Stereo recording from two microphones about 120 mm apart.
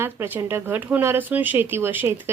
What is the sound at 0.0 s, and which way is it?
Speech, 20° right (ahead or behind).